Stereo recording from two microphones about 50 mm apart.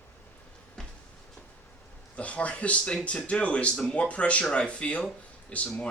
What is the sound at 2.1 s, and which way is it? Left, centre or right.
Speech, left.